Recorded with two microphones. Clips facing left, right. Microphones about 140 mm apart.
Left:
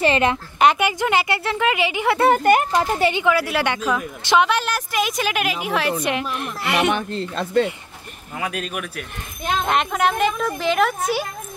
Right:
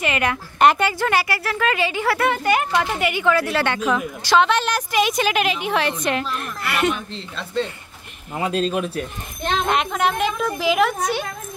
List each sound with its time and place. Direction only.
0.0 s a woman's voice: 25° left (ahead or behind)
0.6 s a woman's voice: centre (ahead or behind)
0.8 s speech: 15° left (ahead or behind)
2.2 s speech: 45° left (ahead or behind); by 3.3 s 30° left (ahead or behind)
3.3 s a child's voice: 10° left (ahead or behind)
6.0 s speech: 15° left (ahead or behind)
7.1 s speech: 45° left (ahead or behind)
8.4 s speech: 30° right (ahead or behind)
9.4 s a child's voice: 5° left (ahead or behind)